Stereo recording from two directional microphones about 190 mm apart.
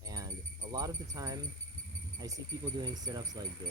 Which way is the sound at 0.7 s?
20° right (ahead or behind).